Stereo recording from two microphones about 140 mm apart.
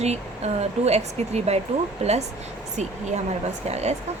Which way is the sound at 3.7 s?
50° right (ahead or behind).